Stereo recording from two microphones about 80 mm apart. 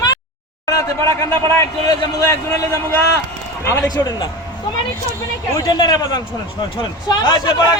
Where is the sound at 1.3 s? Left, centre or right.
Left.